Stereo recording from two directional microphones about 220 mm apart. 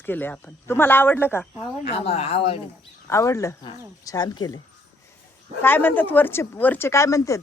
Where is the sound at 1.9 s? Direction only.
25° left (ahead or behind).